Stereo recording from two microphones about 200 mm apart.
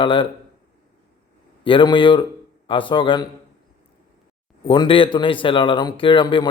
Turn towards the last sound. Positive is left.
turn(degrees=25)  # may be behind; listen again after turning